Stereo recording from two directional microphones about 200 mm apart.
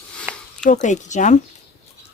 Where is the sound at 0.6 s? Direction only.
40° left (ahead or behind).